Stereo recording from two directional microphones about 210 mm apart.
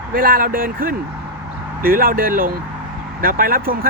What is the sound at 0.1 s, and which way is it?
Speech, 45° right (ahead or behind).